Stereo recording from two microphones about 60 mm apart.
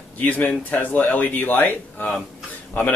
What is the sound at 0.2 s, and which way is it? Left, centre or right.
Speech, left.